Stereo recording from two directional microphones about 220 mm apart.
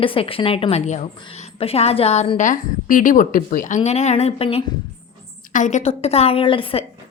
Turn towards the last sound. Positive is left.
turn(degrees=25)  # may be behind; listen again after turning